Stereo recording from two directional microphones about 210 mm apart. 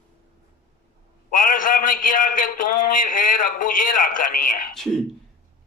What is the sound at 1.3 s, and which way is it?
A man's voice, 40° left (ahead or behind).